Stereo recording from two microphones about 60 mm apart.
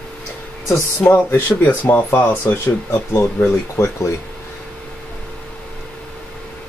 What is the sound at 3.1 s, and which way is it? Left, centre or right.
Speech, left.